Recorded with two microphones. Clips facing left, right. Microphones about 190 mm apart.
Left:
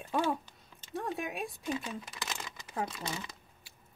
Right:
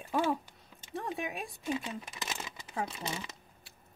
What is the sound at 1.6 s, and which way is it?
Speech, 20° right (ahead or behind).